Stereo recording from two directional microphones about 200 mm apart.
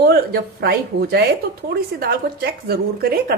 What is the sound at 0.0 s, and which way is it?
Speech, 55° right (ahead or behind).